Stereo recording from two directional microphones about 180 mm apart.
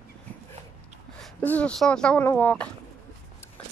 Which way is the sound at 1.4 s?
5° left (ahead or behind).